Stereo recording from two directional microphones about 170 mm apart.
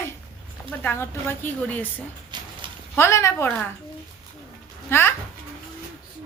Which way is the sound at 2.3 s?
25° right (ahead or behind).